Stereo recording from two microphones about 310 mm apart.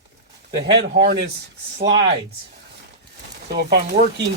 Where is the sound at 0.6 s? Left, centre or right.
Right.